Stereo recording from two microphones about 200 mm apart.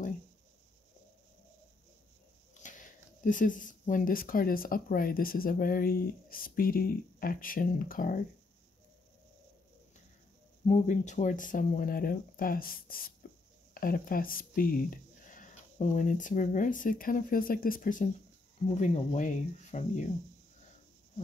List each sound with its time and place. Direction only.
2.6 s speech: 40° left (ahead or behind)
10.7 s speech: 35° left (ahead or behind)
13.2 s a sound: 45° left (ahead or behind)
13.7 s speech: 45° left (ahead or behind)